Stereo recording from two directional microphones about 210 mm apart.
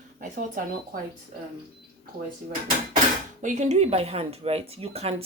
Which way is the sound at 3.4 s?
35° right (ahead or behind).